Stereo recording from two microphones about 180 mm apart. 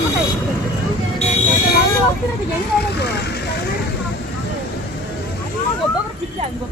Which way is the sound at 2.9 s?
65° left (ahead or behind).